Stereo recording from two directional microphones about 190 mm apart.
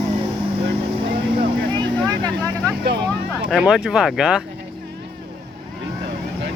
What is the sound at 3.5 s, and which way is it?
Speech, 5° right (ahead or behind).